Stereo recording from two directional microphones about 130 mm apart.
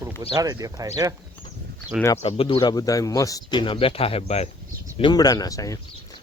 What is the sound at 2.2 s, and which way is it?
Speech, 50° left (ahead or behind).